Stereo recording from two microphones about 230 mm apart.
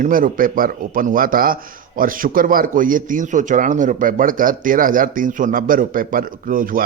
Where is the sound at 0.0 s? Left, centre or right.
Right.